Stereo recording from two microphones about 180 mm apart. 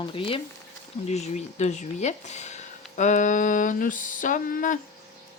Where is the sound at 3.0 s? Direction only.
45° left (ahead or behind).